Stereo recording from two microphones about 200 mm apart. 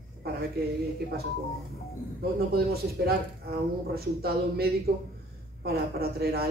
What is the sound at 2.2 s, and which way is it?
A man's voice, 50° right (ahead or behind).